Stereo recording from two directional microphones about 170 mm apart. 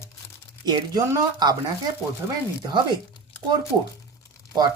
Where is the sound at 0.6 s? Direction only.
20° right (ahead or behind).